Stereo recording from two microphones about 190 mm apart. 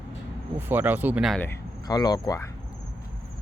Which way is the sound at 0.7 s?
10° right (ahead or behind).